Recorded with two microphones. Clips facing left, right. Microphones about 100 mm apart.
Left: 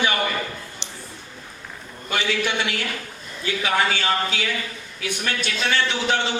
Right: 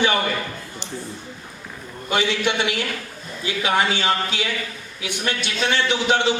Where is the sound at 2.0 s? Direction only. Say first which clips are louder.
Right 3 dB; 20° right (ahead or behind).